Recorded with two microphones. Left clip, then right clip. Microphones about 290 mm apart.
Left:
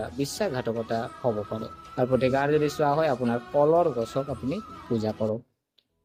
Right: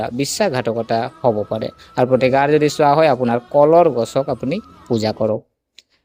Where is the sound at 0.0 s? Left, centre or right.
Right.